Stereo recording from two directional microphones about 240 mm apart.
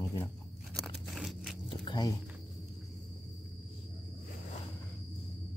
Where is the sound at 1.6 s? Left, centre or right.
Centre.